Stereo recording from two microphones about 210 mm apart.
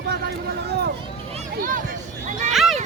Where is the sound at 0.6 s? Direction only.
50° right (ahead or behind).